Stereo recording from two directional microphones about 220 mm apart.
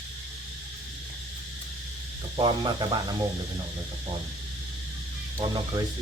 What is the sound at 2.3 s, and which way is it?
Insect, 20° right (ahead or behind).